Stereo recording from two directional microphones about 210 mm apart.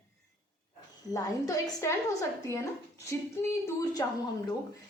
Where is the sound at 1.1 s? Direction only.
15° left (ahead or behind).